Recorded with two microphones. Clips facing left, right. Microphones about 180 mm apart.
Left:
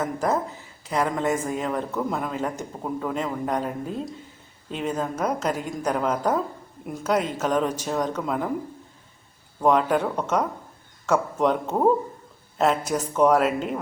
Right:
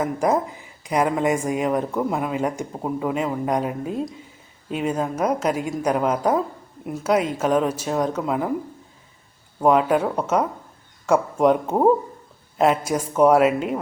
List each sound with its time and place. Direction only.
0.0 s a man's voice: 10° right (ahead or behind)
9.6 s a man's voice: 10° right (ahead or behind)